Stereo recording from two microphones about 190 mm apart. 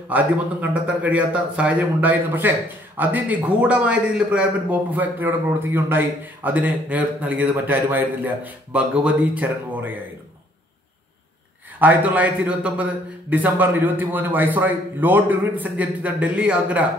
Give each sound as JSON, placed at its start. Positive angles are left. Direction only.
{"t": 0.1, "sound": "a man's voice", "side_deg": -10}
{"t": 11.8, "sound": "a man's voice", "side_deg": -10}